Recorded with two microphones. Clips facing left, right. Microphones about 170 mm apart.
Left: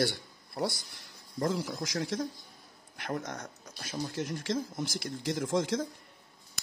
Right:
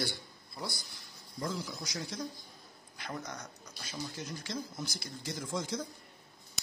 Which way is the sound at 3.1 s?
50° left (ahead or behind).